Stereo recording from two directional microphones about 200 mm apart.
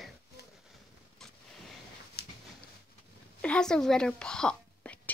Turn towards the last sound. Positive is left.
turn(degrees=5)  # may be behind; listen again after turning